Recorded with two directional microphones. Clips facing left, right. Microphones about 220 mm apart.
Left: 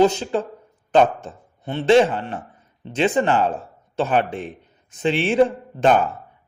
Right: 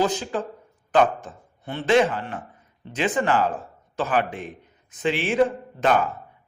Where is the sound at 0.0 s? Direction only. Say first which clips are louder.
Left 6 dB; 25° left (ahead or behind).